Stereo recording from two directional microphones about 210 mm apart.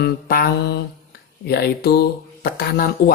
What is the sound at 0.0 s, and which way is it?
Mantra, 45° left (ahead or behind).